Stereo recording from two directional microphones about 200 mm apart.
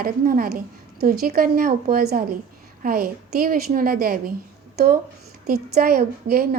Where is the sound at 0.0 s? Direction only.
45° right (ahead or behind).